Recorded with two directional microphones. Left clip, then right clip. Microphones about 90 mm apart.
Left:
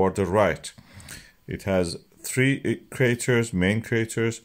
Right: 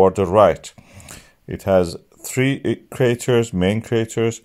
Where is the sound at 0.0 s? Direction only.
35° right (ahead or behind).